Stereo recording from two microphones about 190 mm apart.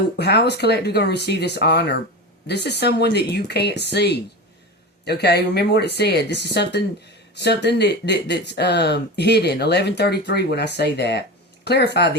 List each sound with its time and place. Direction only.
0.2 s speech: 60° left (ahead or behind)